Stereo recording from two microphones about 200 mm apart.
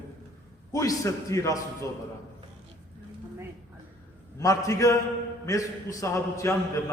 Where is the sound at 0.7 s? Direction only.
15° left (ahead or behind).